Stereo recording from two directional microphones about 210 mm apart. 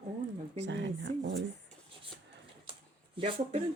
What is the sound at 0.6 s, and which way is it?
Speech, 55° right (ahead or behind).